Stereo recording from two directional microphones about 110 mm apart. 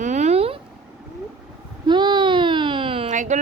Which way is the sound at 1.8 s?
45° right (ahead or behind).